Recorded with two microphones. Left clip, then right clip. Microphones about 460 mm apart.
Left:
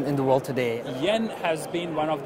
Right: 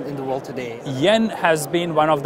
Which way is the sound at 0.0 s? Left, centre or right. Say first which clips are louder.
Left 3 dB; left.